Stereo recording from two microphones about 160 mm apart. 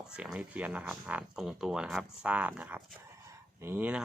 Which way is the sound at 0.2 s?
10° right (ahead or behind).